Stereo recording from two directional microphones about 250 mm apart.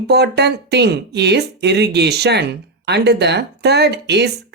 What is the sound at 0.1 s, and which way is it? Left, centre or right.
Speech, right.